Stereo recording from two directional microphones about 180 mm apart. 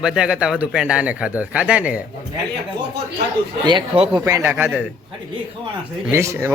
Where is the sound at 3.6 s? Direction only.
25° right (ahead or behind).